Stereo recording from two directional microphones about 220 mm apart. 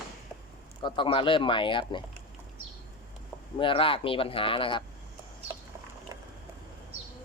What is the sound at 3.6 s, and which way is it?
Speech, 25° left (ahead or behind).